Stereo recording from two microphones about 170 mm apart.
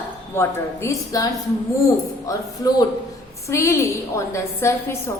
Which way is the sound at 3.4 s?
15° left (ahead or behind).